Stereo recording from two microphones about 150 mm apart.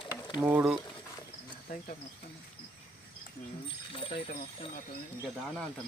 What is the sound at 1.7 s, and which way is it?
Speech, 75° left (ahead or behind).